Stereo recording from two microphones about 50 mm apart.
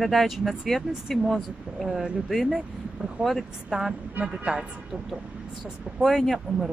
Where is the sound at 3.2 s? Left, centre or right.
Right.